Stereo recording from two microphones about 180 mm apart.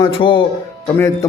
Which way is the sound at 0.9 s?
15° left (ahead or behind).